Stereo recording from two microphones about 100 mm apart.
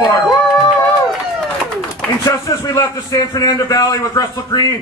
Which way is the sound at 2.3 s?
35° left (ahead or behind).